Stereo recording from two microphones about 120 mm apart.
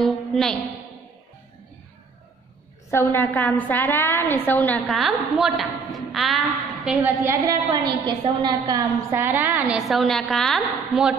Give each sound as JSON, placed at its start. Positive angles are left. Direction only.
{"t": 0.0, "sound": "a sound", "side_deg": 5}
{"t": 2.9, "sound": "a woman's voice", "side_deg": 20}
{"t": 4.9, "sound": "a woman's voice", "side_deg": 0}
{"t": 7.0, "sound": "a woman's voice", "side_deg": -15}
{"t": 7.4, "sound": "a woman's voice", "side_deg": -35}
{"t": 9.1, "sound": "a woman's voice", "side_deg": -20}
{"t": 9.8, "sound": "a woman's voice", "side_deg": 0}